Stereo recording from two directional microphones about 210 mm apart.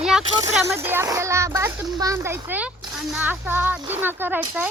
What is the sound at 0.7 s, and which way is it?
Speech, 10° right (ahead or behind).